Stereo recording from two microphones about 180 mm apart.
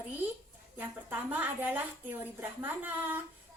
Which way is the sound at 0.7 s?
10° right (ahead or behind).